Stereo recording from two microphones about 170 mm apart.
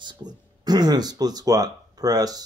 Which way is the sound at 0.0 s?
25° right (ahead or behind).